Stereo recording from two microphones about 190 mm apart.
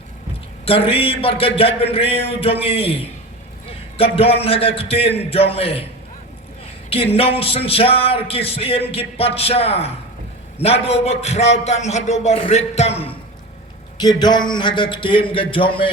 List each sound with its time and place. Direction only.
0.6 s speech: 30° left (ahead or behind)
6.9 s a man's voice: 30° left (ahead or behind)